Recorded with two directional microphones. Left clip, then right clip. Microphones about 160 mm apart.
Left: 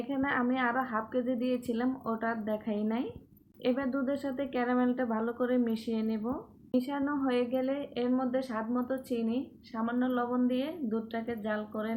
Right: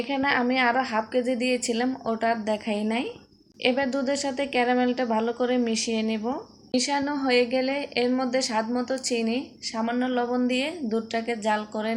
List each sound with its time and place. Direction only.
0.1 s speech: 15° right (ahead or behind)